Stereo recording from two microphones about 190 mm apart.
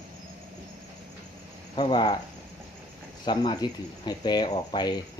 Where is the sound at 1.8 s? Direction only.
25° left (ahead or behind).